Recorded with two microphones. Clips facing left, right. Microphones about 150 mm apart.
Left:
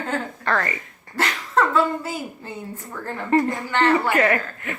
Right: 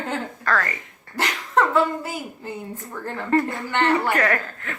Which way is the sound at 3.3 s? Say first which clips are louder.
Left 2 dB; 15° left (ahead or behind).